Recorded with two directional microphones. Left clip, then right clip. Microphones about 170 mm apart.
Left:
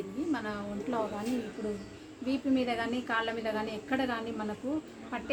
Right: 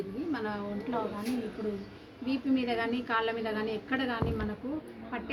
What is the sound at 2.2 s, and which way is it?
A woman's voice, 20° left (ahead or behind).